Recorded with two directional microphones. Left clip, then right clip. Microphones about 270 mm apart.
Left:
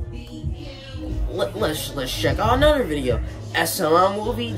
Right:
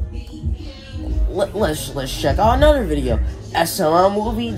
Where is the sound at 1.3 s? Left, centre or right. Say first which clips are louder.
Right 4 dB; centre.